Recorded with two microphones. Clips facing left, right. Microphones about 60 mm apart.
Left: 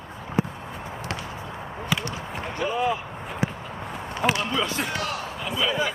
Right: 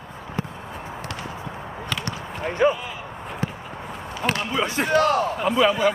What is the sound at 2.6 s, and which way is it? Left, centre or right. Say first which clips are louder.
Speech: right 9 dB; right.